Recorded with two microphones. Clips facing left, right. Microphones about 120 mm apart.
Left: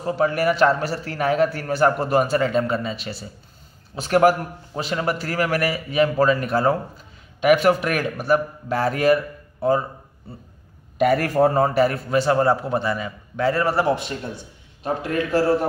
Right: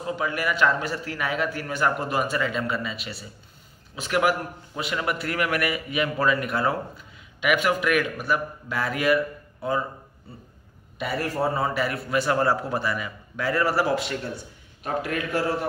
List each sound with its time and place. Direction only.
0.0 s a man's voice: 45° left (ahead or behind)
11.0 s a man's voice: 55° left (ahead or behind); by 15.4 s 30° left (ahead or behind)